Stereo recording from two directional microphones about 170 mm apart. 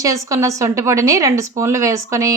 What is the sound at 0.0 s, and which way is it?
A woman's voice, 20° right (ahead or behind).